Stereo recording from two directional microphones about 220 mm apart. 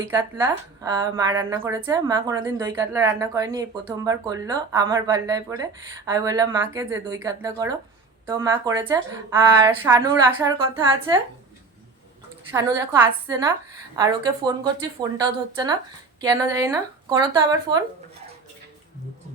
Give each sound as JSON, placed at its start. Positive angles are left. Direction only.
{"t": 0.2, "sound": "a woman's voice", "side_deg": -15}
{"t": 12.5, "sound": "a woman's voice", "side_deg": -15}